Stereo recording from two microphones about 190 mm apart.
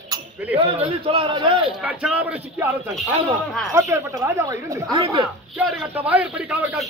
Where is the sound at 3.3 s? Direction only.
15° right (ahead or behind).